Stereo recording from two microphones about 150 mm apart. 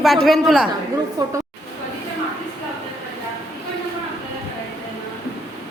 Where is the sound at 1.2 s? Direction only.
25° right (ahead or behind).